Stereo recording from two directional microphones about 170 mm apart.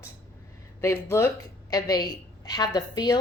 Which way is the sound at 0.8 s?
15° left (ahead or behind).